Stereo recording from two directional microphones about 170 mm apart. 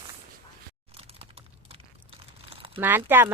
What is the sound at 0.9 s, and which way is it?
Crumpling, 35° right (ahead or behind).